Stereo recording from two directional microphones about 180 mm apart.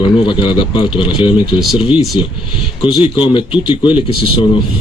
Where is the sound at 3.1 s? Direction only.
30° left (ahead or behind).